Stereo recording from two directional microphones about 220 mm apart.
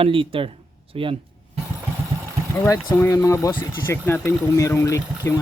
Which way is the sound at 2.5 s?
15° left (ahead or behind).